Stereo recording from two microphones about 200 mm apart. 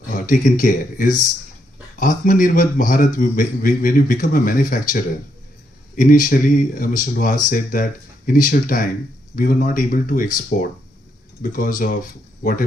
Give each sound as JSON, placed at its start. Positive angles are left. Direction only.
{"t": 0.1, "sound": "a man's voice", "side_deg": 40}